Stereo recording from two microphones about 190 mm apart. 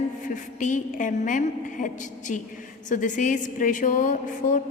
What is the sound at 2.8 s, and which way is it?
A woman's voice, 40° left (ahead or behind).